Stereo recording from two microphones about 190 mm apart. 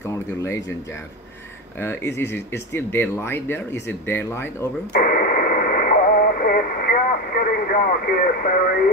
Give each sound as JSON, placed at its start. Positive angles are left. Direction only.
{"t": 0.0, "sound": "speech", "side_deg": 15}
{"t": 1.8, "sound": "speech", "side_deg": 15}
{"t": 4.9, "sound": "radio", "side_deg": 50}